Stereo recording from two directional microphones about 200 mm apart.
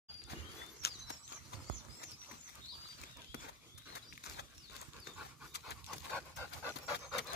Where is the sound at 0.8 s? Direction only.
50° left (ahead or behind).